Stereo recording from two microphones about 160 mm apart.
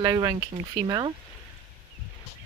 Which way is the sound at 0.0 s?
25° right (ahead or behind).